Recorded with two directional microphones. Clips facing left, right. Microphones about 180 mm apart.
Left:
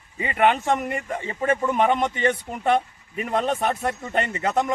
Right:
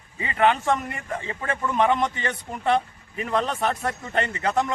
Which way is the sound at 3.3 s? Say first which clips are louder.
Left 1 dB; 20° left (ahead or behind).